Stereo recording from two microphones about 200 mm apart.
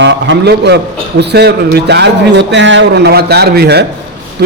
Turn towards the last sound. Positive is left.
turn(degrees=-55)  # may be behind; listen again after turning